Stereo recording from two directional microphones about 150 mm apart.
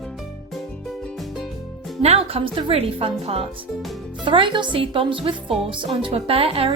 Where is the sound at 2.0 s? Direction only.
40° right (ahead or behind).